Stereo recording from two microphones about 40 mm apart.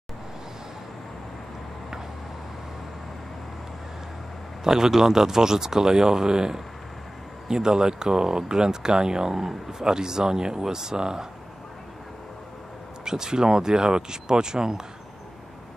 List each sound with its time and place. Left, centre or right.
4.6 s speech: centre
13.0 s speech: centre